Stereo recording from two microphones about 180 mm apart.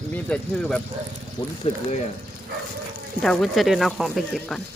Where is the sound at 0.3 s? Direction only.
5° left (ahead or behind).